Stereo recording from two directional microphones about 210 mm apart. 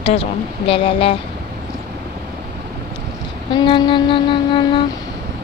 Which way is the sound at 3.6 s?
20° left (ahead or behind).